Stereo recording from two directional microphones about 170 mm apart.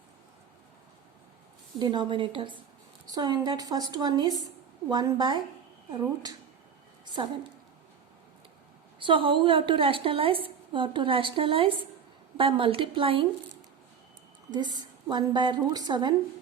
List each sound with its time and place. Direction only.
1.8 s a woman's voice: 25° right (ahead or behind)
9.0 s a woman's voice: 30° right (ahead or behind)